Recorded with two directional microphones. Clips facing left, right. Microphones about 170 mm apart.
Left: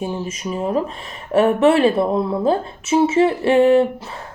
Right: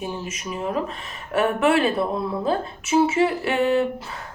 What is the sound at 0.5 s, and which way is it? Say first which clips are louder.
Speech: left 5 dB; 35° left (ahead or behind).